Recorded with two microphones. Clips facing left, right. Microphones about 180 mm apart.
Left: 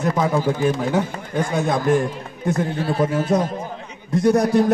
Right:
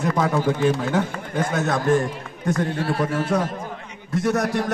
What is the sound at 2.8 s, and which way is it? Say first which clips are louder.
Speech: left 3 dB; 20° left (ahead or behind).